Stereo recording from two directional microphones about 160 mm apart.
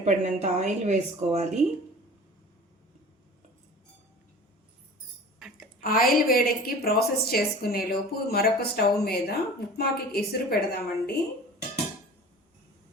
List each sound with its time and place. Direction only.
0.0 s a woman's voice: 45° right (ahead or behind)
5.8 s a woman's voice: 65° left (ahead or behind)